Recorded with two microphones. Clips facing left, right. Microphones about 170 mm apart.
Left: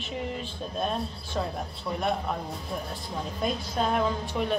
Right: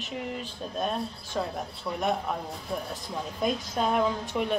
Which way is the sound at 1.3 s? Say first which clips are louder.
Even; 5° right (ahead or behind).